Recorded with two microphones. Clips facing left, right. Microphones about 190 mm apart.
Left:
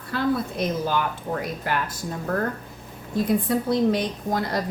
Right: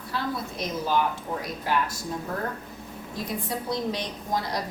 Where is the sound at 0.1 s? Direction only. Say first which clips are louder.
Left 7 dB; 55° left (ahead or behind).